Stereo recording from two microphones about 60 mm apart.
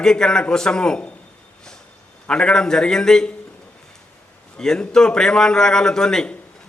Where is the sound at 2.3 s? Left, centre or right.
Centre.